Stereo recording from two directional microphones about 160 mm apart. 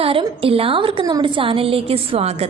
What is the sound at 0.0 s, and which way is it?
A woman's voice, 35° right (ahead or behind).